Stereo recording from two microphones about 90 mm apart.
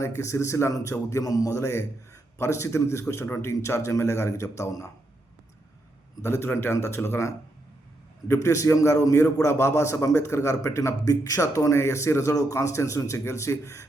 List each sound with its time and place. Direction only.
0.0 s a man's voice: 35° left (ahead or behind)
6.2 s a man's voice: 30° left (ahead or behind)